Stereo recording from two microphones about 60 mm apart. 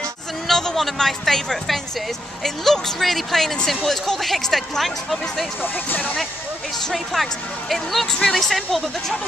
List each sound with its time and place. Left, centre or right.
0.5 s a woman's voice: centre
5.6 s speech: left
6.8 s a woman's voice: centre